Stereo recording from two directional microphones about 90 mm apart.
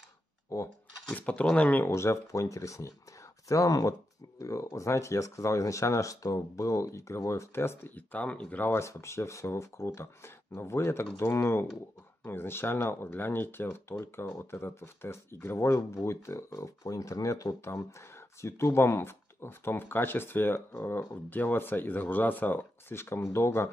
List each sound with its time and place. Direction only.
0.5 s speech: 35° left (ahead or behind)
1.1 s speech: 15° left (ahead or behind)
1.9 s speech: 30° left (ahead or behind)